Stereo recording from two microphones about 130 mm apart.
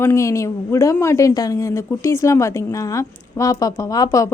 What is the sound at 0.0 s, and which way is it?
A woman's voice, 20° left (ahead or behind).